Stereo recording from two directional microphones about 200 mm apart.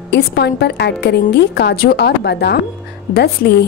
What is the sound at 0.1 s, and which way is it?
A woman's voice, 55° left (ahead or behind).